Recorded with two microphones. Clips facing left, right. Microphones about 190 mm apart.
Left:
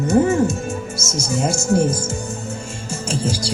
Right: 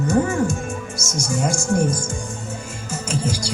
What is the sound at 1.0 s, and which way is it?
Speech, 25° left (ahead or behind).